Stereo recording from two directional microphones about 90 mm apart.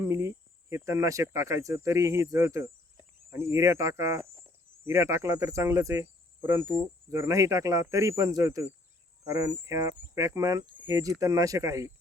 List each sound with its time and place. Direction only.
0.0 s speech: 30° right (ahead or behind)